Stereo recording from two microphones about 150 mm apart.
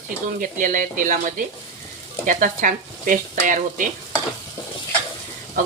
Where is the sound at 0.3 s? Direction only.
65° right (ahead or behind).